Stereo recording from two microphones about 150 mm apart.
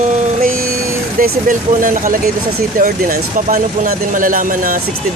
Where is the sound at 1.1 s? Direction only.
65° right (ahead or behind).